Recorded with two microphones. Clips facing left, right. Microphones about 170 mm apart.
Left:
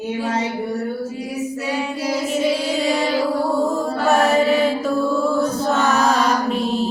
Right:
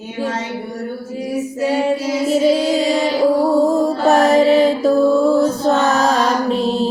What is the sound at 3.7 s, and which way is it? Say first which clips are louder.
Mantra: right 5 dB; 35° right (ahead or behind).